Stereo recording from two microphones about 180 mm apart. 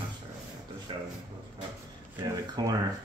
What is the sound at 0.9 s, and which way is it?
Speech, 25° right (ahead or behind).